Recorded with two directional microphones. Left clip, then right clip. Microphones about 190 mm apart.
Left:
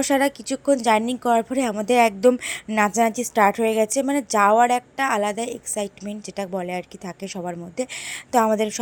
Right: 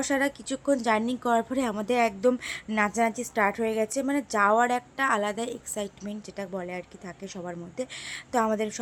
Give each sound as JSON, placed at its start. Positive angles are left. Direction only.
{"t": 0.0, "sound": "a woman's voice", "side_deg": 20}